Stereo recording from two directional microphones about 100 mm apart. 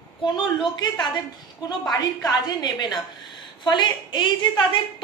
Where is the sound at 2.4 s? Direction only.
45° left (ahead or behind).